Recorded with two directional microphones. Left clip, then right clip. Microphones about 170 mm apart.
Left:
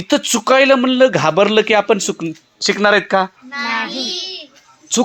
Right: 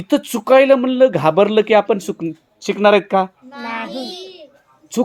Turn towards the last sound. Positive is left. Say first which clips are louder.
# left 3 dB
turn(degrees=0)  # may be behind; listen again after turning